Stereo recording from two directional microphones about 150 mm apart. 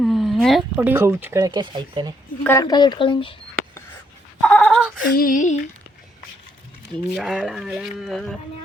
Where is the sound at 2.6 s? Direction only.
25° left (ahead or behind).